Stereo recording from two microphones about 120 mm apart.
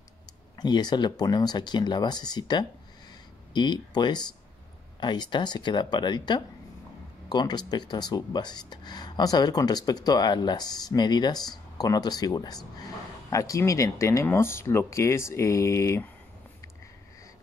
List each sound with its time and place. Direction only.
0.6 s speech: 35° left (ahead or behind)